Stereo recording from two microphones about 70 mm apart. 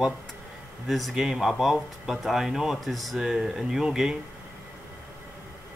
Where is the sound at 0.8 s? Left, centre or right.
Centre.